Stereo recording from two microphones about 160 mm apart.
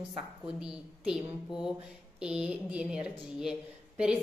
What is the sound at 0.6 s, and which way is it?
Speech, 5° right (ahead or behind).